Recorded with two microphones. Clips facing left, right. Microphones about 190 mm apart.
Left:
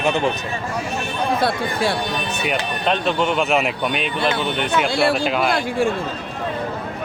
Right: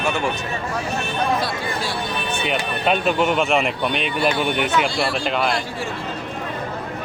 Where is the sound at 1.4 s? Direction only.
60° left (ahead or behind).